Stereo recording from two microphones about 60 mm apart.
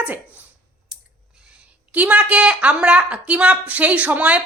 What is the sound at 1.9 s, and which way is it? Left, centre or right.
A woman's voice, right.